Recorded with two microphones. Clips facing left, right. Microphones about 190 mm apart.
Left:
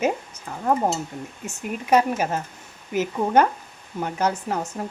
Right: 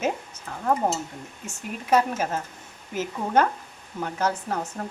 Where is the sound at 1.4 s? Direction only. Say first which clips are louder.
Left 2 dB; 15° left (ahead or behind).